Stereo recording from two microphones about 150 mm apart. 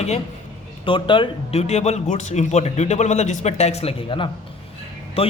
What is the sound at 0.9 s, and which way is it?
A man's voice, 35° left (ahead or behind).